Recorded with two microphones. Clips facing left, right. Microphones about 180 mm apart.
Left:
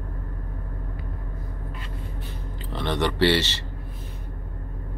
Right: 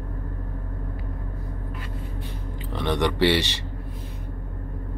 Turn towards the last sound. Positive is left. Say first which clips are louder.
# even
turn(degrees=-15)  # may be behind; listen again after turning